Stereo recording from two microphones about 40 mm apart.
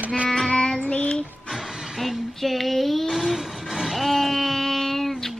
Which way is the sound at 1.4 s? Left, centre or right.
Centre.